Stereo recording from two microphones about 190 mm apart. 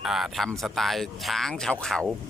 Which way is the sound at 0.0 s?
Centre (ahead or behind).